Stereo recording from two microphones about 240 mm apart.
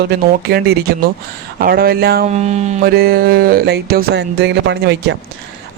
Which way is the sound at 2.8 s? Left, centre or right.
Right.